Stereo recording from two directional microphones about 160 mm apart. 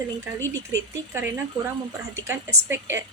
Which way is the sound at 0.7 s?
15° right (ahead or behind).